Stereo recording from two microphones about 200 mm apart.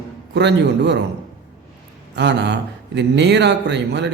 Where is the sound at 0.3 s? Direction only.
60° right (ahead or behind).